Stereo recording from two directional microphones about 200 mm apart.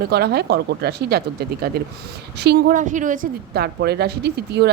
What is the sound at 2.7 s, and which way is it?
Speech, 40° right (ahead or behind).